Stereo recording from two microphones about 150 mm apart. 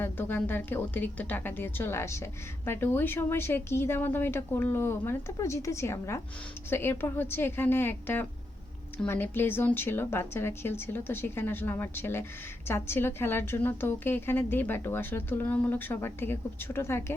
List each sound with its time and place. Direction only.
0.0 s a woman's voice: 15° left (ahead or behind)